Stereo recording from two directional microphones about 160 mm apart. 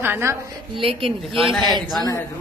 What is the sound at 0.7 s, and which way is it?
A woman's voice, 35° right (ahead or behind).